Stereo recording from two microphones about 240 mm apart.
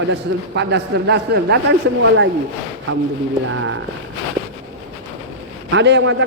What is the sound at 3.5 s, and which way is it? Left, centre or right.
Speech, right.